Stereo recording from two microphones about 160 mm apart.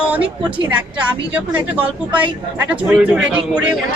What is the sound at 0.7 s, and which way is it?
A woman's voice, 5° right (ahead or behind).